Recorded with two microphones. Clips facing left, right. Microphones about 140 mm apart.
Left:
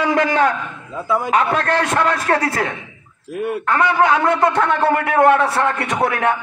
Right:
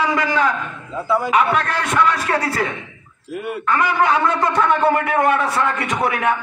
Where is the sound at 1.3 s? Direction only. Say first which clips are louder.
Left 3 dB; 35° left (ahead or behind).